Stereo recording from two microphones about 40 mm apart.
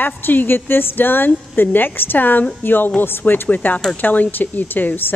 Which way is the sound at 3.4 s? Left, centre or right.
Left.